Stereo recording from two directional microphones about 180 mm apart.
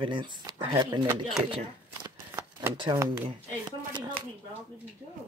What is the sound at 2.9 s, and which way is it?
Speech, 15° right (ahead or behind).